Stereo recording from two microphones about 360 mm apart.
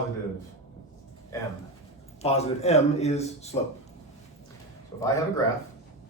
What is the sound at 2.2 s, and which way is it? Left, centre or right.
Speech, centre.